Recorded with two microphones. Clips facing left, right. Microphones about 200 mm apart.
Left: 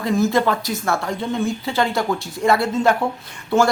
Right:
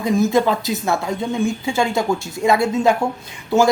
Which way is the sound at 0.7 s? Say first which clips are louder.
Right 2 dB; 20° right (ahead or behind).